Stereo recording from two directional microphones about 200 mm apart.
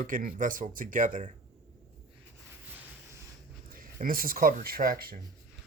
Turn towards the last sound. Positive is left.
turn(degrees=-45)  # may be behind; listen again after turning